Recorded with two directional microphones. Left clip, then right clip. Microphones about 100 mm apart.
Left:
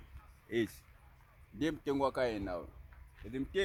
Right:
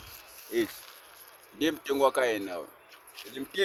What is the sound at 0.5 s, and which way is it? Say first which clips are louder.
Speech: right 5 dB; 30° left (ahead or behind).